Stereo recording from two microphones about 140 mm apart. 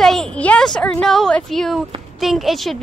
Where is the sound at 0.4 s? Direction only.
5° left (ahead or behind).